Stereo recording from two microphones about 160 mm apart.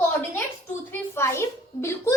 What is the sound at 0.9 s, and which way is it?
A child's voice, 15° left (ahead or behind).